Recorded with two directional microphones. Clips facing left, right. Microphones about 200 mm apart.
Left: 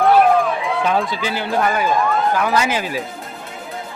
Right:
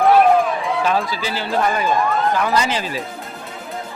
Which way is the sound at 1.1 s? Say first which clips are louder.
Left 1 dB; 15° left (ahead or behind).